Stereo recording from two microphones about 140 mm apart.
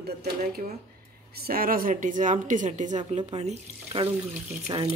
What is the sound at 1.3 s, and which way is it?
Speech, 90° right.